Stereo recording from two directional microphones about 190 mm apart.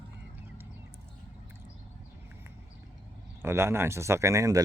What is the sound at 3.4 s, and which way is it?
Speech, 15° right (ahead or behind).